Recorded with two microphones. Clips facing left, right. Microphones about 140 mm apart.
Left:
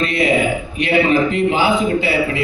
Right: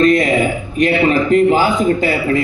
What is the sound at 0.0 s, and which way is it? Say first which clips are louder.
A woman's voice: right 4 dB; 45° right (ahead or behind).